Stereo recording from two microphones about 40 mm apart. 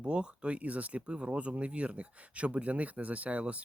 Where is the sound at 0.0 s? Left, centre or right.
Right.